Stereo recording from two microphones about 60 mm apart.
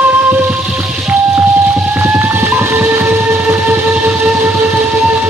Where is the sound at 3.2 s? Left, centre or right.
Right.